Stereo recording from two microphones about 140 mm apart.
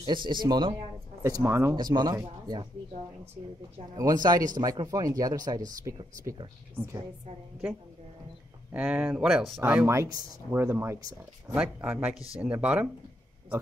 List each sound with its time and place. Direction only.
0.0 s speech: 35° right (ahead or behind)
1.2 s speech: 20° right (ahead or behind)
1.8 s speech: 30° right (ahead or behind)
3.9 s speech: 25° right (ahead or behind)
6.7 s speech: 15° right (ahead or behind)
8.7 s speech: 10° right (ahead or behind)
9.6 s speech: 15° right (ahead or behind)
11.5 s speech: 10° right (ahead or behind)